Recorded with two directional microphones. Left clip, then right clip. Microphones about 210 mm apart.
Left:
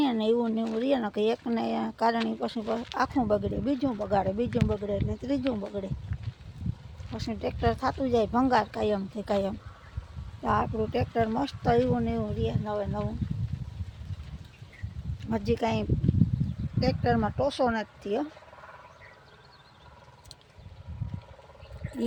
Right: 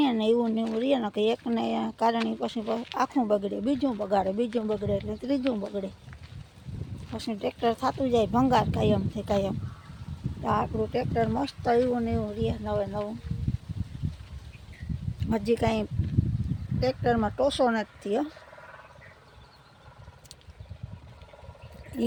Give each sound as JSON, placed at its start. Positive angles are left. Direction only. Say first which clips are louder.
{"t": 0.0, "sound": "speech", "louder": "right 2 dB", "side_deg": -5}
{"t": 7.1, "sound": "speech", "louder": "right 1 dB", "side_deg": -10}
{"t": 15.3, "sound": "speech", "louder": "right 2 dB", "side_deg": -15}